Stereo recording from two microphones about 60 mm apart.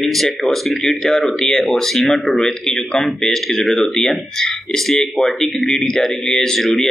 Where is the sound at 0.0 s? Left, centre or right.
Centre.